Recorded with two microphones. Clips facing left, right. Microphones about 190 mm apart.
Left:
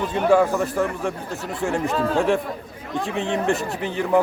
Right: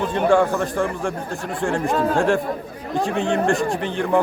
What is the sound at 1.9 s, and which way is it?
Speech, 45° right (ahead or behind).